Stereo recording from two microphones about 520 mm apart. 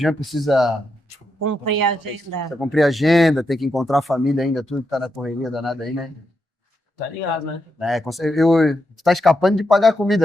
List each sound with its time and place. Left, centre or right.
0.0 s speech: centre
1.4 s speech: right
2.6 s speech: centre
7.8 s speech: centre